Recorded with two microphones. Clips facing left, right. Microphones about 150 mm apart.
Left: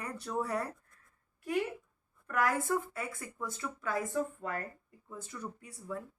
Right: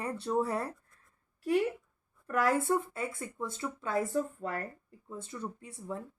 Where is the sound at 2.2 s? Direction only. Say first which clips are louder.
Right 3 dB; 30° right (ahead or behind).